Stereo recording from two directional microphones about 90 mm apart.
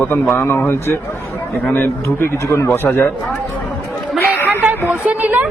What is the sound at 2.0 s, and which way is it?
A man's voice, 30° left (ahead or behind).